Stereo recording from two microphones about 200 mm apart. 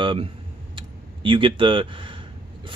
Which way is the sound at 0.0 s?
25° right (ahead or behind).